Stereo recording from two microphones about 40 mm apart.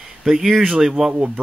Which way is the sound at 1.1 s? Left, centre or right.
Right.